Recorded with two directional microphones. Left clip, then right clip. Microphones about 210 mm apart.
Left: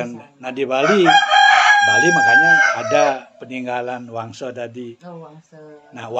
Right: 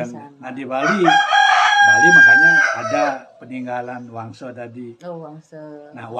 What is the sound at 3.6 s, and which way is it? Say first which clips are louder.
A man's voice: left 3 dB; 35° left (ahead or behind).